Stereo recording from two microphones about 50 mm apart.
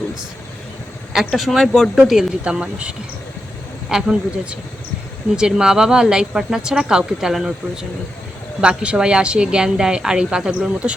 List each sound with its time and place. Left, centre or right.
1.1 s speech: centre
1.5 s speech: centre
2.4 s speech: right